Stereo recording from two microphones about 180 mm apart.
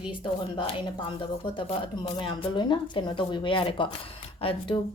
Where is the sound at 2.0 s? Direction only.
30° left (ahead or behind).